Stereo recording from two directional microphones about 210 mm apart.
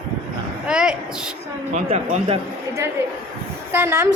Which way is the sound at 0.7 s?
5° right (ahead or behind).